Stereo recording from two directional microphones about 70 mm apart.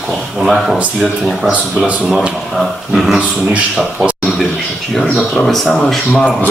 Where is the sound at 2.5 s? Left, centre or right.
Centre.